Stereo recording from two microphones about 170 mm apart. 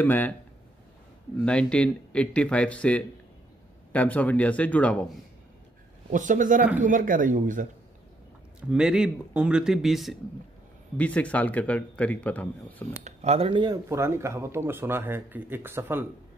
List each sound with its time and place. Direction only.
0.0 s speech: 10° left (ahead or behind)
1.4 s speech: 5° left (ahead or behind)
6.0 s speech: 50° right (ahead or behind)
8.5 s speech: 5° right (ahead or behind)
13.0 s speech: 40° right (ahead or behind)
13.8 s speech: 15° right (ahead or behind)